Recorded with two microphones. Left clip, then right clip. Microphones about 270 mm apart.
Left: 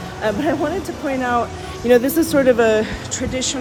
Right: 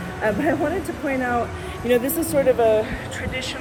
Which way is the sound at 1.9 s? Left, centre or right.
Left.